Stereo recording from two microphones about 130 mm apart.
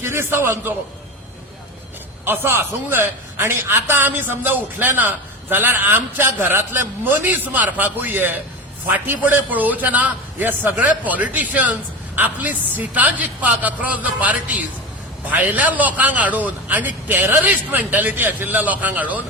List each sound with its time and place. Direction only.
0.0 s a man's voice: 20° right (ahead or behind)
2.2 s a man's voice: 15° right (ahead or behind)